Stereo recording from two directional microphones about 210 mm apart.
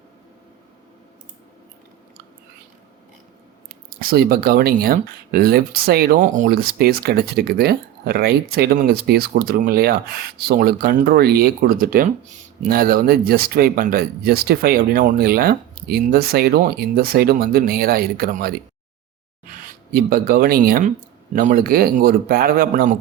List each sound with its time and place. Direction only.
3.8 s speech: 45° right (ahead or behind)
19.9 s speech: 45° right (ahead or behind)